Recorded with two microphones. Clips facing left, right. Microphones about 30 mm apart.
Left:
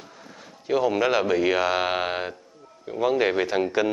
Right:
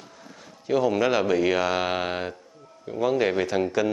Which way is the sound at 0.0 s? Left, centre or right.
Centre.